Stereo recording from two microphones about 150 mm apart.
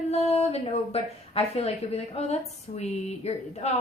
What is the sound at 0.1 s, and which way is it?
A woman's voice, 45° left (ahead or behind).